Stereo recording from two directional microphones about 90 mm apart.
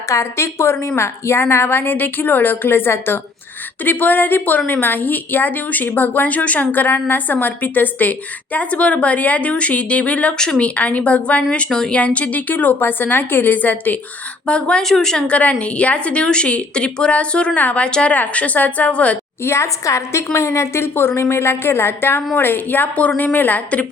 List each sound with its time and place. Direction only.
0.1 s a woman's voice: 30° left (ahead or behind); by 19.2 s 15° left (ahead or behind)
19.5 s a woman's voice: 35° left (ahead or behind)